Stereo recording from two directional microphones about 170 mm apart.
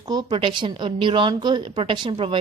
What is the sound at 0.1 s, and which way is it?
A woman's voice, 30° right (ahead or behind).